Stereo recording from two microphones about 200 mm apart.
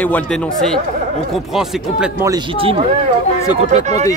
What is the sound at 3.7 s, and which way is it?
Speech, 35° right (ahead or behind).